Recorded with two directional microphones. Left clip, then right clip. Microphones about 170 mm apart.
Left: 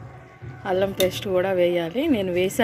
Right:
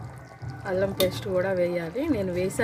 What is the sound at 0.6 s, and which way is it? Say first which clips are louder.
Speech: left 3 dB; 30° left (ahead or behind).